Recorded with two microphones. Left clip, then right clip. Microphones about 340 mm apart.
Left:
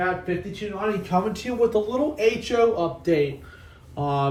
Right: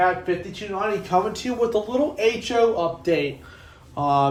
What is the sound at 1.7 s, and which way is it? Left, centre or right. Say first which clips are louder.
Speech: right 1 dB; centre.